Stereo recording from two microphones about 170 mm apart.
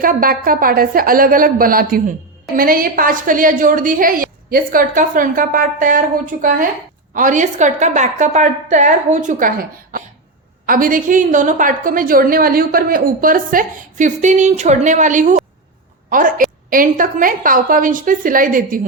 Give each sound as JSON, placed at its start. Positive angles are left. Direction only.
{"t": 0.0, "sound": "a woman's voice", "side_deg": -55}